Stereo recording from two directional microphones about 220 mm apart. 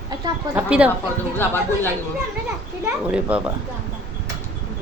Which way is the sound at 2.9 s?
5° right (ahead or behind).